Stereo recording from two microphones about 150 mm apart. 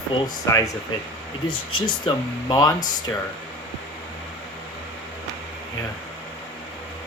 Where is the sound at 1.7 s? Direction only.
30° left (ahead or behind).